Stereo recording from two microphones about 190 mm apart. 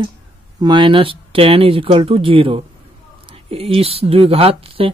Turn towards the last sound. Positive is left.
turn(degrees=-30)  # may be behind; listen again after turning